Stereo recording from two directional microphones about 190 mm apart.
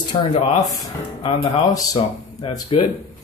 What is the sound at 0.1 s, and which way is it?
Speech, 30° left (ahead or behind).